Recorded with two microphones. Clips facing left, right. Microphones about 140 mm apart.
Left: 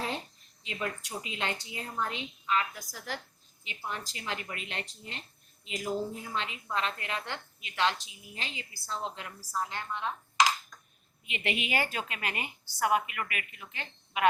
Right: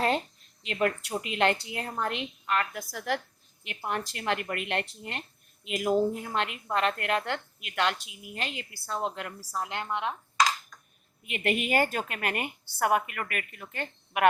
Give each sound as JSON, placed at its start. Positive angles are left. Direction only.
{"t": 0.6, "sound": "a woman's voice", "side_deg": -65}
{"t": 11.3, "sound": "a woman's voice", "side_deg": -50}